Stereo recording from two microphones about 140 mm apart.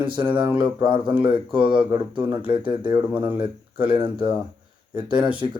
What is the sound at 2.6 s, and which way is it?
A man's voice, 35° right (ahead or behind).